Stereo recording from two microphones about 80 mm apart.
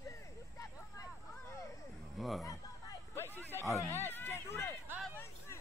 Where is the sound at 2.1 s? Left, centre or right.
Centre.